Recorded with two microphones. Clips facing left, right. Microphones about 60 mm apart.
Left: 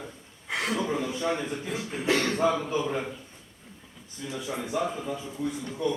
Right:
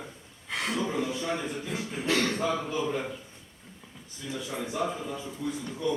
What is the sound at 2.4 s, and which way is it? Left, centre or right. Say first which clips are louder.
Speech: left 4 dB; left.